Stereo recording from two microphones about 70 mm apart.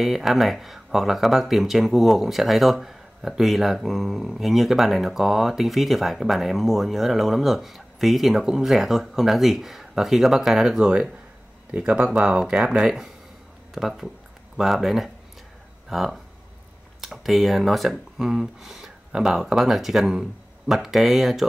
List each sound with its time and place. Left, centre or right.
0.0 s speech: centre
11.7 s speech: centre